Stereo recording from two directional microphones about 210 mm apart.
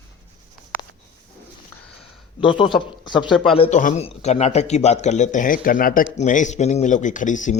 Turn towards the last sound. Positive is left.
turn(degrees=35)  # may be behind; listen again after turning